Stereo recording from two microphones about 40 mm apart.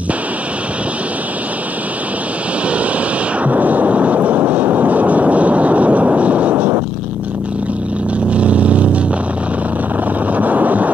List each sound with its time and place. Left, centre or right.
3.4 s a sound: right
4.7 s vehicle: right
8.3 s vehicle: right
10.3 s wind noise: right